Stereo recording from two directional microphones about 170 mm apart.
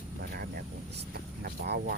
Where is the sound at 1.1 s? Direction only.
65° right (ahead or behind).